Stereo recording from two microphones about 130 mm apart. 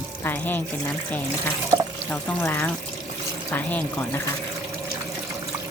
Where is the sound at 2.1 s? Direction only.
15° left (ahead or behind).